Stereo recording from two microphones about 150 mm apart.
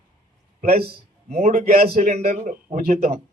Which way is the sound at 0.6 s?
75° right (ahead or behind).